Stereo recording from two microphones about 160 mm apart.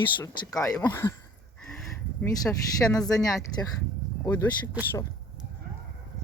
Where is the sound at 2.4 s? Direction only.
20° left (ahead or behind).